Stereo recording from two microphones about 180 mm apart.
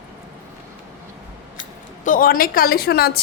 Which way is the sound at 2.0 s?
50° left (ahead or behind).